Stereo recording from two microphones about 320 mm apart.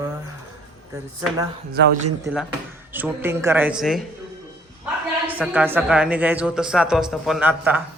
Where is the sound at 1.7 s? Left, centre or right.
Right.